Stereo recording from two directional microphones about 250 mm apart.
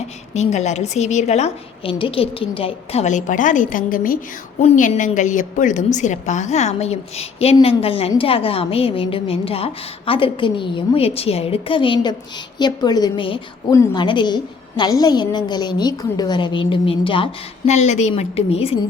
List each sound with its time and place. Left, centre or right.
0.3 s a woman's voice: left